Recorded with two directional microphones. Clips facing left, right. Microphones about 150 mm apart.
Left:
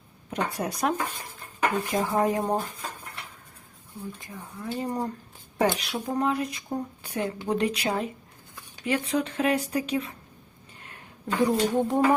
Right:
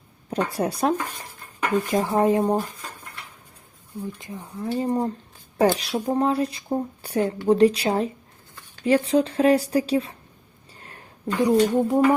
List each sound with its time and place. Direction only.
0.3 s speech: 35° right (ahead or behind)
2.4 s speech: 10° right (ahead or behind)
4.2 s speech: 20° right (ahead or behind)
11.4 s speech: 10° right (ahead or behind)